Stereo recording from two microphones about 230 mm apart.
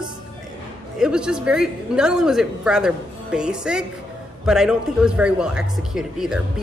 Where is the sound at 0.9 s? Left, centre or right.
Centre.